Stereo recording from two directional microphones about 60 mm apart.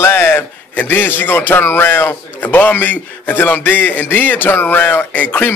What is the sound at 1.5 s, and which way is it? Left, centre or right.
A man's voice, left.